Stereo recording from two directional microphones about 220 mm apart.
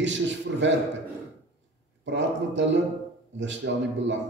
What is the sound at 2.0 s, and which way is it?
A man's voice, 55° right (ahead or behind).